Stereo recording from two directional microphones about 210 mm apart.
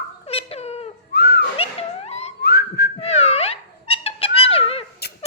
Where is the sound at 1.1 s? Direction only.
50° left (ahead or behind).